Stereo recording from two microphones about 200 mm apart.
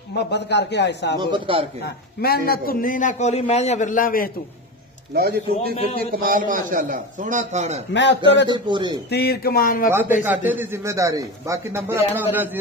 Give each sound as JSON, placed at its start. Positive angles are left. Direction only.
{"t": 0.1, "sound": "speech", "side_deg": 55}
{"t": 1.1, "sound": "a man's voice", "side_deg": -25}
{"t": 1.9, "sound": "a man's voice", "side_deg": 50}
{"t": 5.1, "sound": "a man's voice", "side_deg": -50}
{"t": 7.9, "sound": "speech", "side_deg": 60}
{"t": 8.5, "sound": "a man's voice", "side_deg": -25}
{"t": 9.1, "sound": "a man's voice", "side_deg": 50}
{"t": 9.8, "sound": "a man's voice", "side_deg": -10}